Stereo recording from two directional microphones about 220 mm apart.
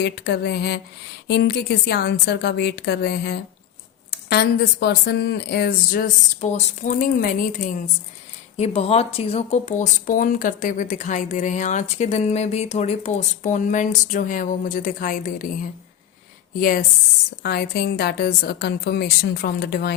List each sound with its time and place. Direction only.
0.0 s speech: 50° left (ahead or behind)
8.5 s speech: 30° left (ahead or behind); by 19.9 s 45° left (ahead or behind)